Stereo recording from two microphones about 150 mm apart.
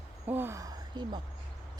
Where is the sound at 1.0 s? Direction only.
30° right (ahead or behind).